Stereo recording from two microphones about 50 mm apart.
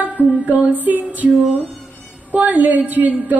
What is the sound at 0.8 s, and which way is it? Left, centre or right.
A woman's voice, right.